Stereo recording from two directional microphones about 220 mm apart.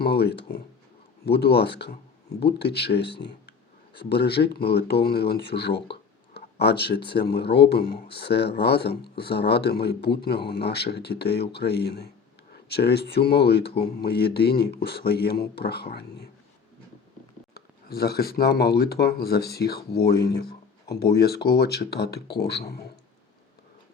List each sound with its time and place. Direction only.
0.0 s speech: 45° left (ahead or behind)
17.5 s speech: 45° left (ahead or behind)